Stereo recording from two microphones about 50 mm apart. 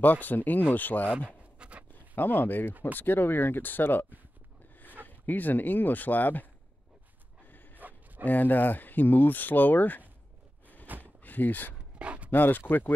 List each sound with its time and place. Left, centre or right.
0.0 s speech: left
1.1 s pant: right
2.1 s speech: left
5.0 s speech: left
7.4 s a sound: left
8.3 s speech: left
10.9 s a sound: right
11.2 s speech: left
12.0 s a sound: right
12.3 s speech: left